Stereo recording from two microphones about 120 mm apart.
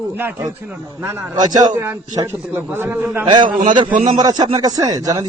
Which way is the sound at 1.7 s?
15° right (ahead or behind).